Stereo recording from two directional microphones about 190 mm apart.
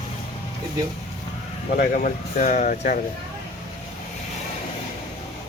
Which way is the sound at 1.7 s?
45° left (ahead or behind).